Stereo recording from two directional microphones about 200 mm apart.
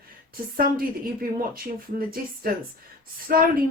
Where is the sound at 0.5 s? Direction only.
45° right (ahead or behind).